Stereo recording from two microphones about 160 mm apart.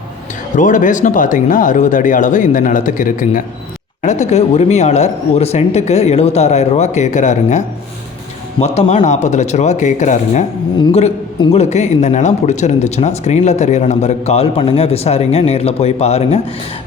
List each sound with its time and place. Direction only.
0.5 s speech: 55° left (ahead or behind)
4.0 s speech: 45° left (ahead or behind)
8.6 s speech: 45° left (ahead or behind)
11.5 s speech: 45° left (ahead or behind)